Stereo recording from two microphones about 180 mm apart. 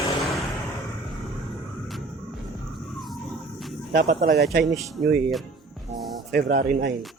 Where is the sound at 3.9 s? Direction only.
65° right (ahead or behind).